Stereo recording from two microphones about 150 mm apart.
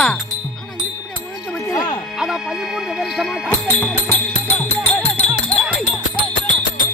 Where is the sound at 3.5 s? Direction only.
15° left (ahead or behind).